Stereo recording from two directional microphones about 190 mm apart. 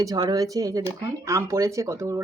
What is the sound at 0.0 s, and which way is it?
Speech, 20° right (ahead or behind).